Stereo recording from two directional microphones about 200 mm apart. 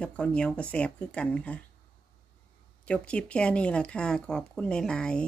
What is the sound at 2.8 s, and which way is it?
Speech, 5° left (ahead or behind).